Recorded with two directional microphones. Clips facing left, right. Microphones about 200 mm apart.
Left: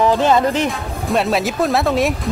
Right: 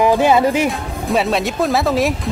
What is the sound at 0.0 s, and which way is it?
Speech, 10° right (ahead or behind).